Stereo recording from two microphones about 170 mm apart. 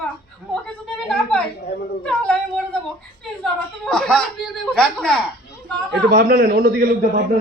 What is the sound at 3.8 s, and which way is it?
Speech, 5° left (ahead or behind).